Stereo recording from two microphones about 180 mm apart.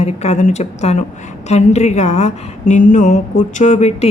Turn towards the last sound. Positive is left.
turn(degrees=40)  # may be behind; listen again after turning